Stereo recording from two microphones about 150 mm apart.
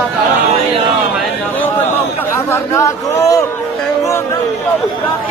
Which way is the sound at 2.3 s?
20° left (ahead or behind).